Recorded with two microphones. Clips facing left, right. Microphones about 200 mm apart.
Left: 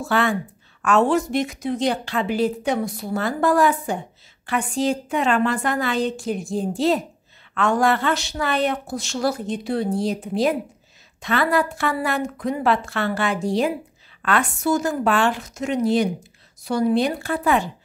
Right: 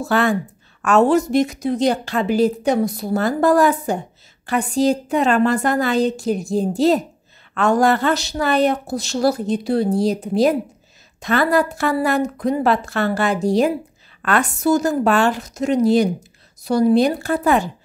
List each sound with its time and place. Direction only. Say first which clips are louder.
0.0 s a woman's voice: right 3 dB; 40° right (ahead or behind)